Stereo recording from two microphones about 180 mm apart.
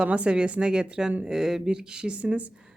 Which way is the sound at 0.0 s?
5° right (ahead or behind).